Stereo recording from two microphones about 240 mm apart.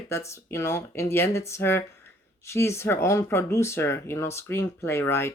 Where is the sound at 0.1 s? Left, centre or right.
Centre.